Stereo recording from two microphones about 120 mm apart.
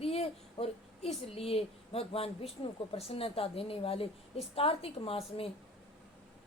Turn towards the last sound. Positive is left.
turn(degrees=50)  # may be behind; listen again after turning